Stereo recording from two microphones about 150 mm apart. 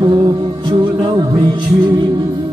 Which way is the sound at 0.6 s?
30° right (ahead or behind).